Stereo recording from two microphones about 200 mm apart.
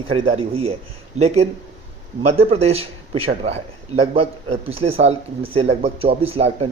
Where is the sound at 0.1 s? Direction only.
25° right (ahead or behind).